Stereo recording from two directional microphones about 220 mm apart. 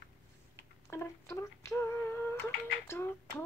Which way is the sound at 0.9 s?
10° left (ahead or behind).